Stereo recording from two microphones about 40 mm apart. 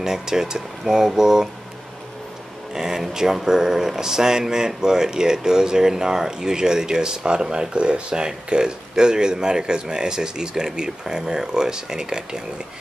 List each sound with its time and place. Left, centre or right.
0.0 s speech: centre
2.7 s speech: centre